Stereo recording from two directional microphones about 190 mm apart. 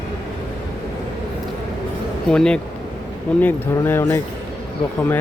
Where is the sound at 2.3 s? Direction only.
5° left (ahead or behind).